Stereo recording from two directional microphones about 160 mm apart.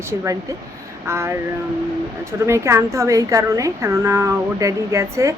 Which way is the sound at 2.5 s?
20° right (ahead or behind).